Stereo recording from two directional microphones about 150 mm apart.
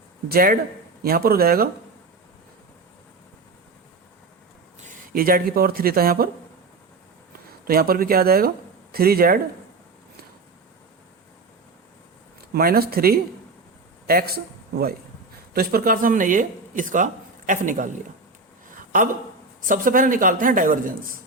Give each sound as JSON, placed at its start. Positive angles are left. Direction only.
{"t": 0.3, "sound": "speech", "side_deg": -75}
{"t": 1.0, "sound": "speech", "side_deg": -85}
{"t": 5.1, "sound": "speech", "side_deg": -75}
{"t": 7.7, "sound": "speech", "side_deg": -80}
{"t": 12.4, "sound": "speech", "side_deg": -90}
{"t": 15.5, "sound": "speech", "side_deg": -75}
{"t": 19.6, "sound": "speech", "side_deg": -65}